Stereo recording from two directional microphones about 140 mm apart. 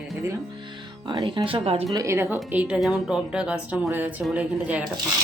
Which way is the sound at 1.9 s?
20° right (ahead or behind).